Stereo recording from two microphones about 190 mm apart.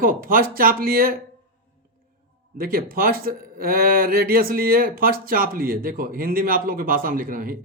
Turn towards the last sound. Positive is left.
turn(degrees=-50)  # may be behind; listen again after turning